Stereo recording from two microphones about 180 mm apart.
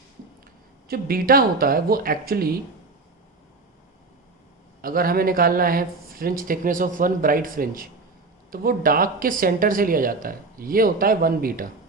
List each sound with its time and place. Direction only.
0.9 s speech: 55° right (ahead or behind)
4.8 s speech: 55° right (ahead or behind)